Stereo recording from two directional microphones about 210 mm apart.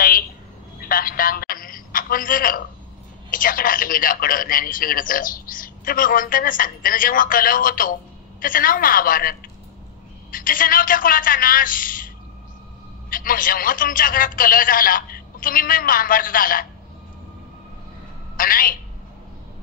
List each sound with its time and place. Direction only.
0.7 s a sound: 40° left (ahead or behind)
3.3 s a man's voice: 40° left (ahead or behind)
13.1 s a man's voice: 40° left (ahead or behind)
18.3 s a woman's voice: 40° left (ahead or behind)